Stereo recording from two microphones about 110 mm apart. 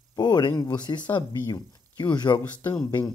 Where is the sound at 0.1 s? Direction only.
40° left (ahead or behind).